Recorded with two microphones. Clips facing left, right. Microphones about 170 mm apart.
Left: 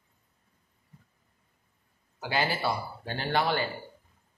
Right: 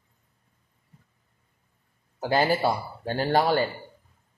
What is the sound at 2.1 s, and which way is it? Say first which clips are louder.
A man's voice: right 7 dB; 45° right (ahead or behind).